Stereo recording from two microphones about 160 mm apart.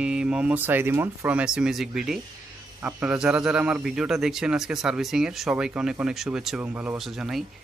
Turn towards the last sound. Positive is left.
turn(degrees=0)  # may be behind; listen again after turning